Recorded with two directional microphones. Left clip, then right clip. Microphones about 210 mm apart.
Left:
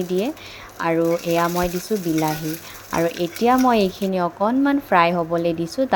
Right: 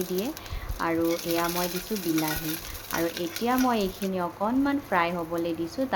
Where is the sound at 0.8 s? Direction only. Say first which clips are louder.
Left 7 dB; 30° left (ahead or behind).